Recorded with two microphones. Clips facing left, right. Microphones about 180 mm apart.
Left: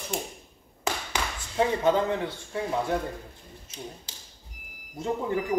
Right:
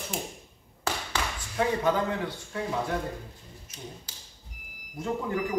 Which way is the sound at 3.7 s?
25° left (ahead or behind).